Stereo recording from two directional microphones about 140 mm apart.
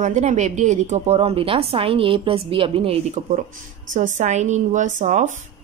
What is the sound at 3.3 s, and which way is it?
A woman's voice, 65° right (ahead or behind).